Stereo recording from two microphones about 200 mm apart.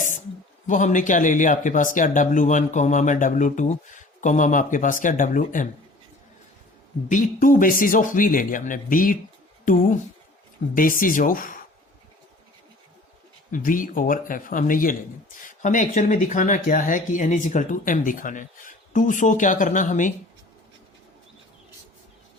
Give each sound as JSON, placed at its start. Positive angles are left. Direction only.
{"t": 0.7, "sound": "speech", "side_deg": 40}
{"t": 7.1, "sound": "speech", "side_deg": 40}
{"t": 13.5, "sound": "speech", "side_deg": 45}